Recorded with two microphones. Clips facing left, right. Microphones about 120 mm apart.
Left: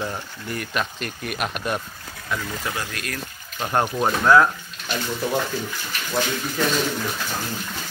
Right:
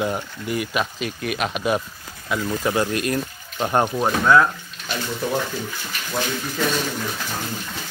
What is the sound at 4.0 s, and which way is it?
Speech, centre (ahead or behind).